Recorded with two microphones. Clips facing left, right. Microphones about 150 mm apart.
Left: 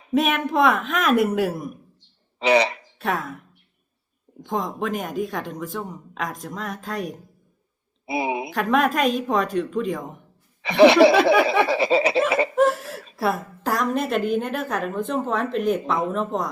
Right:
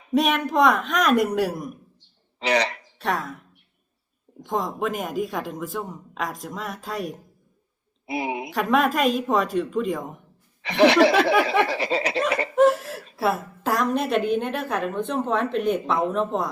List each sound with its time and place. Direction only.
0.1 s a woman's voice: centre (ahead or behind)
2.5 s speech: 20° left (ahead or behind)
3.0 s a woman's voice: centre (ahead or behind)
4.4 s a woman's voice: centre (ahead or behind)
8.5 s a woman's voice: centre (ahead or behind)
10.8 s a sound: 15° left (ahead or behind)
12.5 s a woman's voice: centre (ahead or behind)